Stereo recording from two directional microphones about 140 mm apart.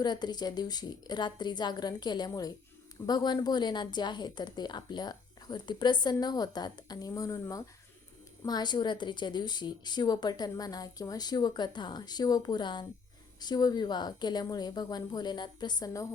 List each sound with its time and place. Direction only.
0.0 s a woman's voice: 30° left (ahead or behind)